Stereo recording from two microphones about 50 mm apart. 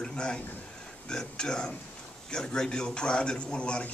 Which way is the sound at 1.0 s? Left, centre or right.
Centre.